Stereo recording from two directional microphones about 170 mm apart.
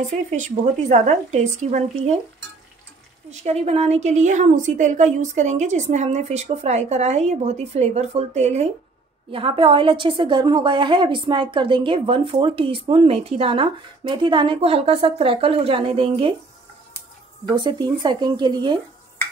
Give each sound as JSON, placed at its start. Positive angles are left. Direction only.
{"t": 0.3, "sound": "a woman's voice", "side_deg": -45}
{"t": 3.3, "sound": "a woman's voice", "side_deg": -40}
{"t": 17.5, "sound": "speech", "side_deg": -25}